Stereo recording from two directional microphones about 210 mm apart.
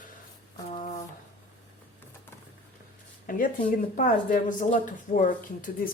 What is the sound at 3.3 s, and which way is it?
A woman's voice, 40° left (ahead or behind).